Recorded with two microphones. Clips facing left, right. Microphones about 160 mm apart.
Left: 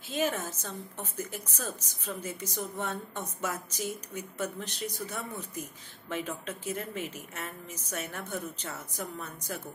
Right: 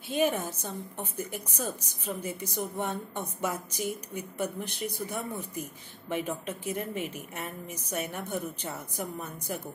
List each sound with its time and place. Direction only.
0.1 s a woman's voice: 10° right (ahead or behind)
3.7 s a woman's voice: 55° right (ahead or behind)
4.4 s a woman's voice: 15° right (ahead or behind)